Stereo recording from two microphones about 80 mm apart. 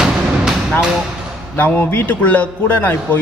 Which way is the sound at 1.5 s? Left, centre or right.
Left.